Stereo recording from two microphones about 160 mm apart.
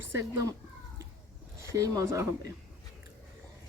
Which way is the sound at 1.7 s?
20° right (ahead or behind).